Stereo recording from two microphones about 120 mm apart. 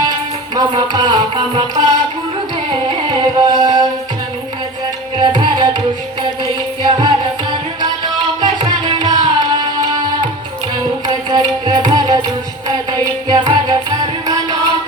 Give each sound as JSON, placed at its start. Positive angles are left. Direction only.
{"t": 0.0, "sound": "music", "side_deg": -35}
{"t": 3.1, "sound": "music", "side_deg": -40}
{"t": 5.1, "sound": "tabla", "side_deg": -40}
{"t": 6.4, "sound": "music", "side_deg": -40}
{"t": 13.2, "sound": "music", "side_deg": -35}